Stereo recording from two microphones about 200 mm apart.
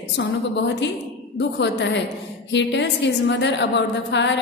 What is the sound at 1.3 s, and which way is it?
A woman's voice, 65° left (ahead or behind).